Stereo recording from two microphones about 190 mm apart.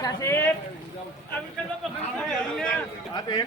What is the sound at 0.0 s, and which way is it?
Speech, 15° left (ahead or behind).